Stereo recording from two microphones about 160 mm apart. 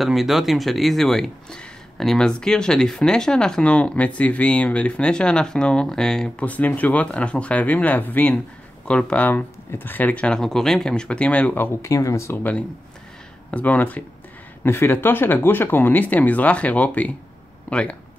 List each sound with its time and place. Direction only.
0.0 s speech: centre (ahead or behind)